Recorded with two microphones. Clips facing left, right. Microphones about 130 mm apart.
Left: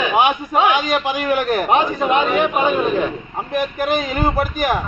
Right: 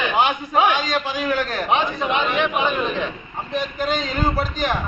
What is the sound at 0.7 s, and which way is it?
Speech, 55° left (ahead or behind).